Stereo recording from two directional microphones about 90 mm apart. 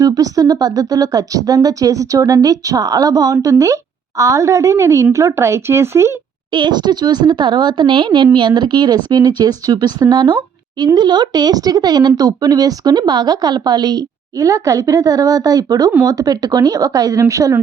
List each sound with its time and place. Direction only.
0.0 s speech: 45° right (ahead or behind)
6.5 s speech: 55° right (ahead or behind); by 17.5 s 35° right (ahead or behind)